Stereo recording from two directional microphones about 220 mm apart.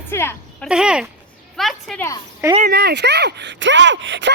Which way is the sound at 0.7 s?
5° right (ahead or behind).